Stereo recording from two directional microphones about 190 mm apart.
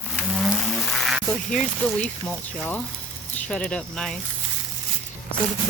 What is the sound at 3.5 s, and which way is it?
Speech, 5° left (ahead or behind).